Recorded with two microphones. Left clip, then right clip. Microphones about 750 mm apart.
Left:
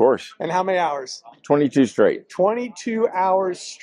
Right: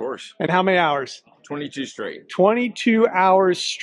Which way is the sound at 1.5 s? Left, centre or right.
Left.